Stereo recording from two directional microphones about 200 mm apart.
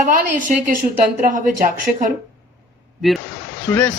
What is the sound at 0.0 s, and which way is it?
Speech, 40° right (ahead or behind).